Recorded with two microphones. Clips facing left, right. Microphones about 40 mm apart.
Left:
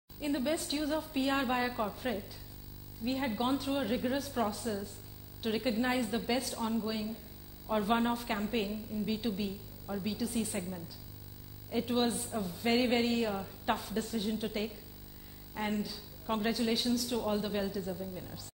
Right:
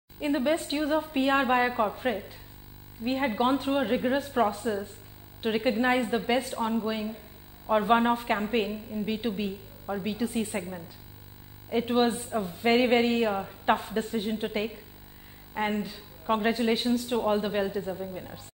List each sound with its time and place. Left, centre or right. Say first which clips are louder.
0.2 s a woman's voice: right 7 dB; right